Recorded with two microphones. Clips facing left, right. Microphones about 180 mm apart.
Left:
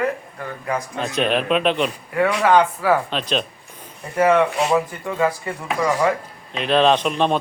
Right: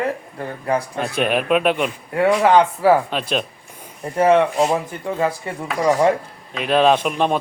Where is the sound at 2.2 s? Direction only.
25° right (ahead or behind).